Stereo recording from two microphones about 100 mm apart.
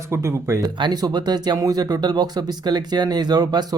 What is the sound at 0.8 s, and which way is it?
Speech, 45° right (ahead or behind).